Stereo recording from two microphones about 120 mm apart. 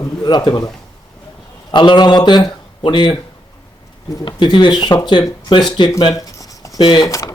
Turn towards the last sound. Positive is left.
turn(degrees=30)  # may be behind; listen again after turning